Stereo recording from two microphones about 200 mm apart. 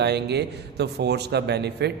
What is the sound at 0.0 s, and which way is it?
A man's voice, 55° right (ahead or behind).